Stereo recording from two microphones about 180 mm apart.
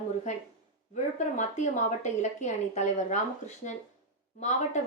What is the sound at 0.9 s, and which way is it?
A woman's voice, 40° left (ahead or behind).